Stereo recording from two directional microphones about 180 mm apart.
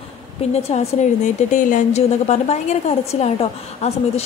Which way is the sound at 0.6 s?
35° left (ahead or behind).